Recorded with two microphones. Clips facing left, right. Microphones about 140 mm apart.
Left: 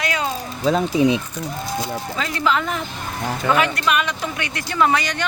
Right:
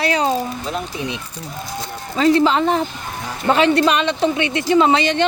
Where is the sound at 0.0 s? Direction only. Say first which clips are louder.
Right 6 dB; 35° right (ahead or behind).